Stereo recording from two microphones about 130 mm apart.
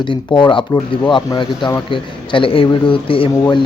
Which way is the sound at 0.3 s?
35° left (ahead or behind).